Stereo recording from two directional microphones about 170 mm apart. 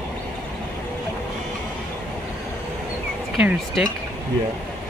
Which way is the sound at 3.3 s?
5° right (ahead or behind).